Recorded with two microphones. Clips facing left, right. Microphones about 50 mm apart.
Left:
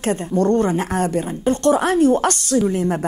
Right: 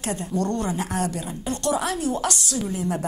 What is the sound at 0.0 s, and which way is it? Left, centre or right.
A woman's voice, left.